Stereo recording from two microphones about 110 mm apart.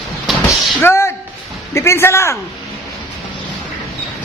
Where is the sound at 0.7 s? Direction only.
20° left (ahead or behind).